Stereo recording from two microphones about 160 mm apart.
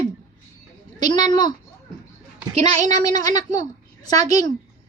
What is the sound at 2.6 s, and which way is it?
Speech, 40° right (ahead or behind).